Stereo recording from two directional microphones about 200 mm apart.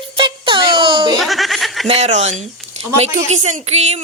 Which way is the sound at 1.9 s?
35° right (ahead or behind).